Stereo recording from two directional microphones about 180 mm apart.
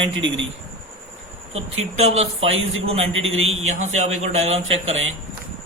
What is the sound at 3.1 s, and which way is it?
Speech, 90° right.